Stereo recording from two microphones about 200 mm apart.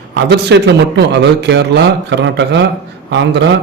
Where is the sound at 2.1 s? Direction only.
60° right (ahead or behind).